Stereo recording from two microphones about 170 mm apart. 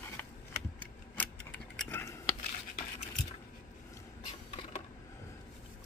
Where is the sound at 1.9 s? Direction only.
15° left (ahead or behind).